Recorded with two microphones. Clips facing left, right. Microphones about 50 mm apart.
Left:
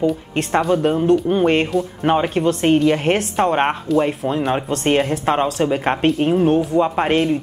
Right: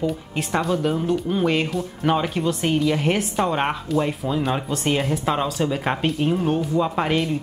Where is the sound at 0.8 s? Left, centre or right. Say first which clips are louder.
Left 5 dB; left.